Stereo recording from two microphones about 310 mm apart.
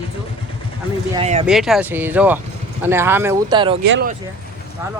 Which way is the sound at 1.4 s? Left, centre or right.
Centre.